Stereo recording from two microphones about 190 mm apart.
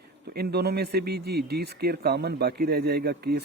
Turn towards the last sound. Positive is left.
turn(degrees=-55)  # may be behind; listen again after turning